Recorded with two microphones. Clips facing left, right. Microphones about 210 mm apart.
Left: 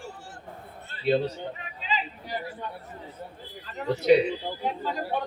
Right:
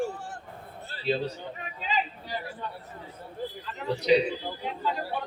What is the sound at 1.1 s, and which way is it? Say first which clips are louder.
Mantra: left 5 dB; 55° left (ahead or behind).